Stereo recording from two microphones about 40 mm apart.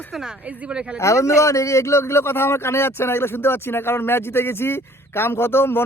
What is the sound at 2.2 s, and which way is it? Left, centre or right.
Speech, left.